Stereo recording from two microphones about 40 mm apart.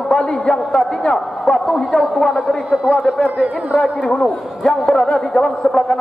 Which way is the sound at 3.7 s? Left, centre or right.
Centre.